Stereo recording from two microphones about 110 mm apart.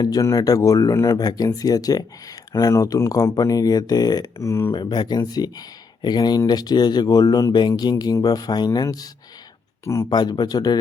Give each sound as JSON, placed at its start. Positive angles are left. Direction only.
{"t": 0.0, "sound": "speech", "side_deg": 35}
{"t": 4.7, "sound": "speech", "side_deg": 45}
{"t": 10.1, "sound": "speech", "side_deg": 40}